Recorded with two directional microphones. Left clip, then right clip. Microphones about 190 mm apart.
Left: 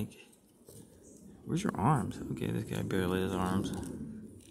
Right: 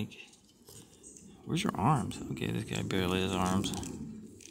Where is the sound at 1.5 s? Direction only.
5° right (ahead or behind).